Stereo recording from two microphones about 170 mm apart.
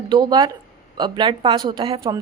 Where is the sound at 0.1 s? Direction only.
25° right (ahead or behind).